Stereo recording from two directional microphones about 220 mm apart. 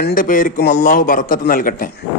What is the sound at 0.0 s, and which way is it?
A man's voice, 40° left (ahead or behind).